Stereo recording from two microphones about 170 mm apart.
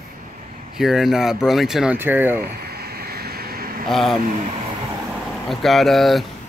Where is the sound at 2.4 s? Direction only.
65° right (ahead or behind).